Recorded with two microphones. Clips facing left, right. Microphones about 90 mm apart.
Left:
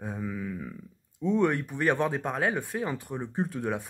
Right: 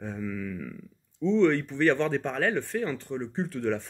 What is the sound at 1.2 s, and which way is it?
Speech, 10° left (ahead or behind).